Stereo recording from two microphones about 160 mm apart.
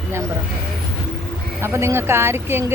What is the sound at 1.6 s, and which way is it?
Speech, 15° right (ahead or behind).